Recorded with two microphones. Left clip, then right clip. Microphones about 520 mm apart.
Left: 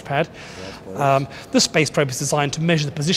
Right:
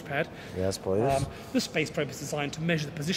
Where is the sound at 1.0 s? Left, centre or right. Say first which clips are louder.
Left 9 dB; left.